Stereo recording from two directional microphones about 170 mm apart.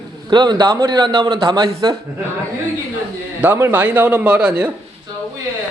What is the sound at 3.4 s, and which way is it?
A man's voice, 15° right (ahead or behind).